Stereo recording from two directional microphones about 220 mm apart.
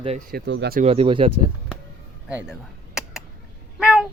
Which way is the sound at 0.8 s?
25° right (ahead or behind).